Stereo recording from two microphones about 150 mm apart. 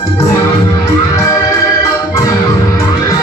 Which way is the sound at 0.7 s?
25° left (ahead or behind).